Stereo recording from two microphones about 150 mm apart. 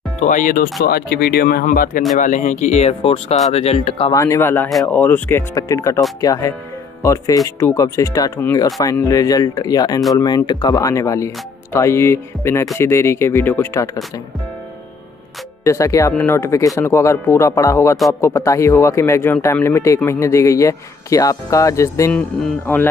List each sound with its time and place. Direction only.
0.2 s speech: 60° left (ahead or behind)
0.8 s speech: 90° left; by 4.1 s 45° left (ahead or behind)
4.1 s speech: 20° left (ahead or behind)
15.6 s speech: 20° left (ahead or behind)
22.1 s speech: 10° left (ahead or behind)